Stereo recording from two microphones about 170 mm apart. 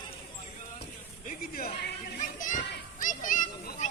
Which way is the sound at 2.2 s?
50° left (ahead or behind).